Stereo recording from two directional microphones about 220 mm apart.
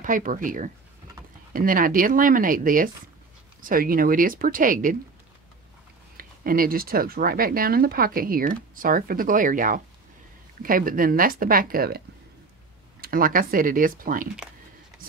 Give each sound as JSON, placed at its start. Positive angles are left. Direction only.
{"t": 0.0, "sound": "speech", "side_deg": -35}
{"t": 6.1, "sound": "speech", "side_deg": -40}
{"t": 13.0, "sound": "speech", "side_deg": -40}